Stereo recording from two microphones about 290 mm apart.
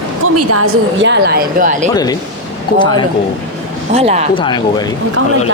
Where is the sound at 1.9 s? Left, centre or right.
Centre.